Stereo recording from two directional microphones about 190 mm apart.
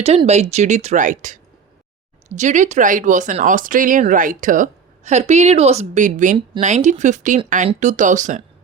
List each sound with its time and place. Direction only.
0.0 s speech: 35° right (ahead or behind)